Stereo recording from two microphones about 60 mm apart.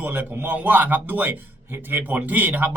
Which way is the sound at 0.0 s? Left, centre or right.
Right.